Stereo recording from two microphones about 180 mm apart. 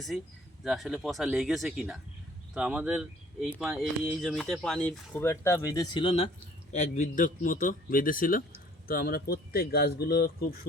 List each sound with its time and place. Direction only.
0.6 s speech: 5° right (ahead or behind); by 6.3 s 30° left (ahead or behind)
6.7 s a man's voice: 40° left (ahead or behind); by 10.5 s 55° left (ahead or behind)